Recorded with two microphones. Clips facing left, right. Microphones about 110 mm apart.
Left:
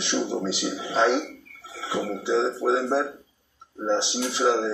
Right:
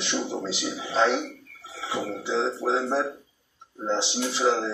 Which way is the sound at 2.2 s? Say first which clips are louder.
Left 3 dB; 15° left (ahead or behind).